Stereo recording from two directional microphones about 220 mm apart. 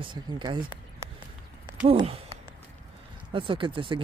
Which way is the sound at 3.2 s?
25° right (ahead or behind).